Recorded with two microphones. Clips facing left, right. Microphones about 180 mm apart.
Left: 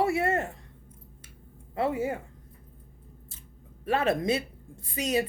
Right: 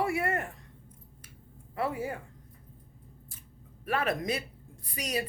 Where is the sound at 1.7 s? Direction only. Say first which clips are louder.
Left 5 dB; 25° left (ahead or behind).